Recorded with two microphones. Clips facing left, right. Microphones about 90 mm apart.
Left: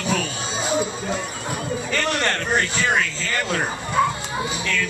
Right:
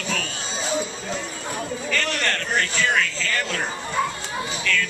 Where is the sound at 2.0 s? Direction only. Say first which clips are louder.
Left 3 dB; 20° left (ahead or behind).